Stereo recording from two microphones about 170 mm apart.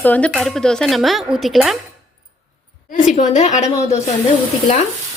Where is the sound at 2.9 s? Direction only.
45° left (ahead or behind).